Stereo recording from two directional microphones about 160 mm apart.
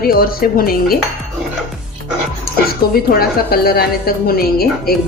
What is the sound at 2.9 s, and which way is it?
A woman's voice, 70° left (ahead or behind).